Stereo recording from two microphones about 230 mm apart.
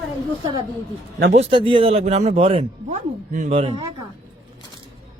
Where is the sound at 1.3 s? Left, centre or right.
Right.